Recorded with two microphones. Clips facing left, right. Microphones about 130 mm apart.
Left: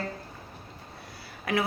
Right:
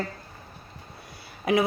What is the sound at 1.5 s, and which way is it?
Speech, 20° right (ahead or behind).